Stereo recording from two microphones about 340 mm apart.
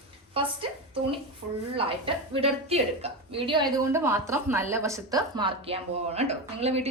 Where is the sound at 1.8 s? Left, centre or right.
Centre.